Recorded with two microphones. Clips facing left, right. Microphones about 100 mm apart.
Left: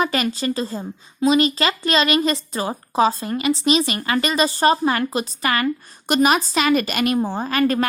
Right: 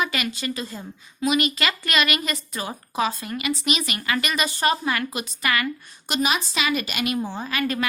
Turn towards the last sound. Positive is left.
turn(degrees=40)  # may be behind; listen again after turning